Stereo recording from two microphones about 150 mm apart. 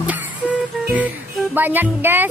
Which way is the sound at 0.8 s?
10° right (ahead or behind).